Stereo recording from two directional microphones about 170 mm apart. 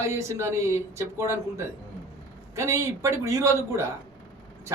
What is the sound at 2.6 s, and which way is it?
A man's voice, 15° right (ahead or behind).